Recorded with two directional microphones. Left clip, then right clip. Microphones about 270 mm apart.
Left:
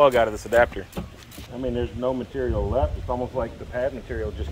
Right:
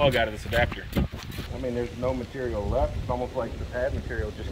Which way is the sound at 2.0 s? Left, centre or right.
Left.